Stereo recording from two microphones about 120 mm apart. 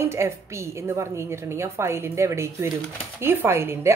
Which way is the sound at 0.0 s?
20° right (ahead or behind).